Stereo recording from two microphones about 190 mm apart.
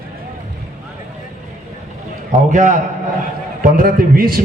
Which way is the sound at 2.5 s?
40° right (ahead or behind).